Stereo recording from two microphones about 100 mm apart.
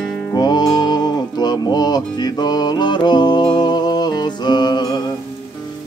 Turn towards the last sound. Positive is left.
turn(degrees=45)  # may be behind; listen again after turning